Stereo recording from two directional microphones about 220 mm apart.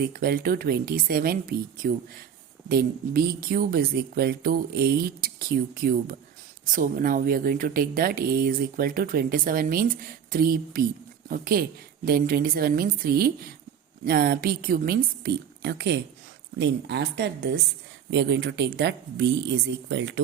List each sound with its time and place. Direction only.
0.0 s speech: 40° right (ahead or behind)